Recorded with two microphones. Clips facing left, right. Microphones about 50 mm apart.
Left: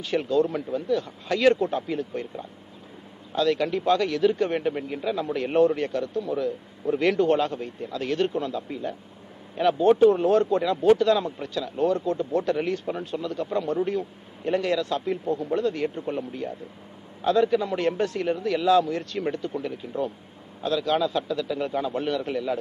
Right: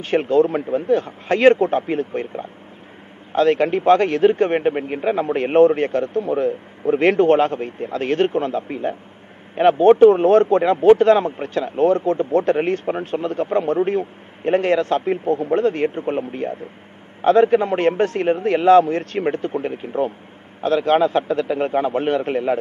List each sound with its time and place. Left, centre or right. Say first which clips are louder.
0.0 s speech: right 7 dB; right